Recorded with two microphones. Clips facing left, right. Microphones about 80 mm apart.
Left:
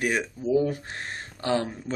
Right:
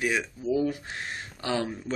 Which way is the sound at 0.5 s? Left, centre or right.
Left.